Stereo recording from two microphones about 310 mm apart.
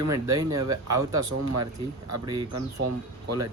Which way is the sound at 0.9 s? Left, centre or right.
Right.